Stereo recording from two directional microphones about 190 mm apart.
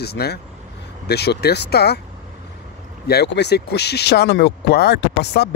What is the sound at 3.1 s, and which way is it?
Speech, 60° left (ahead or behind).